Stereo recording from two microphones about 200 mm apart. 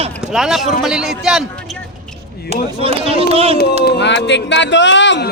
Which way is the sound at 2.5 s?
30° right (ahead or behind).